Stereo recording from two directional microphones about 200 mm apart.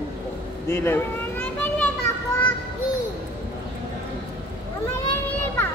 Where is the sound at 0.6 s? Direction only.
10° left (ahead or behind).